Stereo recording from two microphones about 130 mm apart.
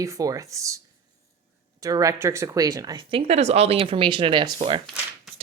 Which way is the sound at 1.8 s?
25° right (ahead or behind).